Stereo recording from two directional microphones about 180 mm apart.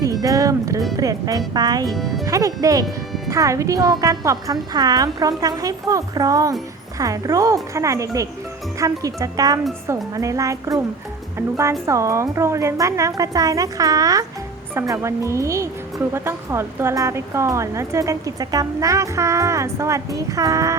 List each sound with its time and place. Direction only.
0.0 s music: 20° right (ahead or behind)
0.9 s a woman's voice: 20° right (ahead or behind)
1.9 s speech: centre (ahead or behind)
2.2 s a woman's voice: 20° right (ahead or behind)